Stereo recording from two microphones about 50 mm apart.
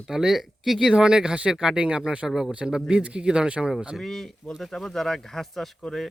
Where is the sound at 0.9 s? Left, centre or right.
Centre.